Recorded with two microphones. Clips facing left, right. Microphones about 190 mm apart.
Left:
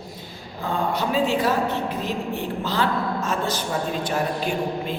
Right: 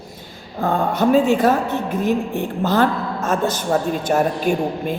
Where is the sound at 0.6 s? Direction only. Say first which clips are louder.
Right 7 dB; 50° right (ahead or behind).